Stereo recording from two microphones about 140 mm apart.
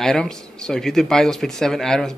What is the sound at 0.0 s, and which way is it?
Speech, 5° left (ahead or behind).